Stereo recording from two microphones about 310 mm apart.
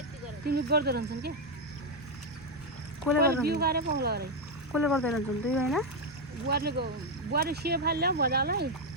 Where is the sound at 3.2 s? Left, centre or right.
Right.